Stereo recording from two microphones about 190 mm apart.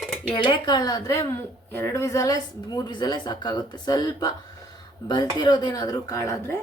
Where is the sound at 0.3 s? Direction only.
25° left (ahead or behind).